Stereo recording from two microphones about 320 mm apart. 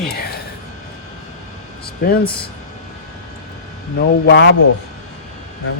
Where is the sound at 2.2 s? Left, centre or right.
Centre.